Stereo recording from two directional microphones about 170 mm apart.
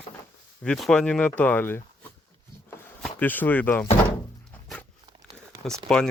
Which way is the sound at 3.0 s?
10° left (ahead or behind).